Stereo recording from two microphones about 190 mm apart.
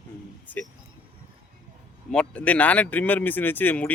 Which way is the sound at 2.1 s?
5° left (ahead or behind).